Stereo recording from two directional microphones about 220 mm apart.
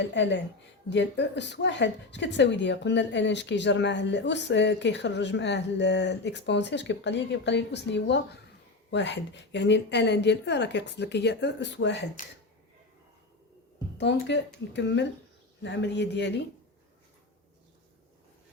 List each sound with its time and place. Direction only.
0.0 s speech: 55° left (ahead or behind)
14.0 s speech: 55° left (ahead or behind)